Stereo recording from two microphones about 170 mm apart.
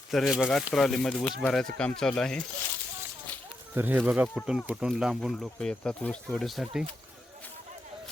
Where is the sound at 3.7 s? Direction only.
10° right (ahead or behind).